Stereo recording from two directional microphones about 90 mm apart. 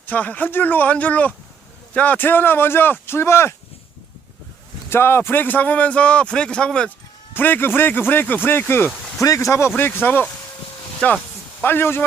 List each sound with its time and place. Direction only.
0.0 s speech: 15° left (ahead or behind)
4.9 s speech: 25° left (ahead or behind); by 6.9 s 10° left (ahead or behind)
7.3 s speech: 20° left (ahead or behind)
9.2 s speech: 35° left (ahead or behind); by 11.2 s 15° left (ahead or behind)
11.6 s speech: 25° left (ahead or behind)